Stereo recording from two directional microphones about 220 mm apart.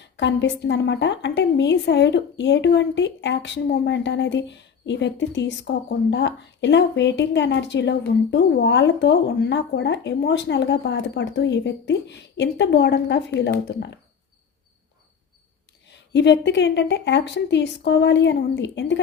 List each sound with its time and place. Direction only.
0.0 s a woman's voice: 55° left (ahead or behind)
15.9 s a woman's voice: 50° left (ahead or behind)